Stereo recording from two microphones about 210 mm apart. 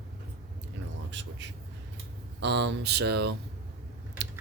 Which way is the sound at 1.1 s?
60° right (ahead or behind).